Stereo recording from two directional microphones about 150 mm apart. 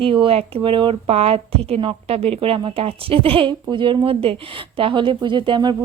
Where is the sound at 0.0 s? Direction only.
35° right (ahead or behind).